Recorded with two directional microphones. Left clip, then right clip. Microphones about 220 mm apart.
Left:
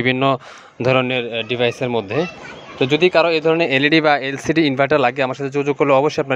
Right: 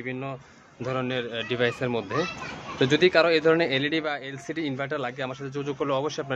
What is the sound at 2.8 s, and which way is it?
Speech, 10° left (ahead or behind).